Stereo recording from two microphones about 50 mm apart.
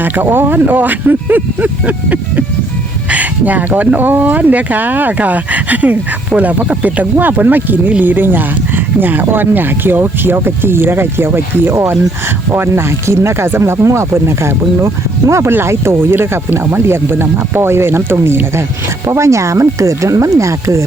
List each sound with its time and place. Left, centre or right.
0.0 s speech: right
15.4 s speech: right
19.0 s speech: right